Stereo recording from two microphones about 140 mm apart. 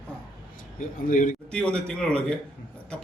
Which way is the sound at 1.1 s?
65° left (ahead or behind).